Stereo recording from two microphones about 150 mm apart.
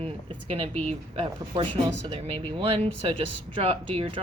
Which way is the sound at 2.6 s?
40° right (ahead or behind).